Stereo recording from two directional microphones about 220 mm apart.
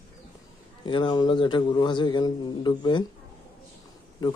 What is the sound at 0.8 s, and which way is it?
Speech, 20° left (ahead or behind).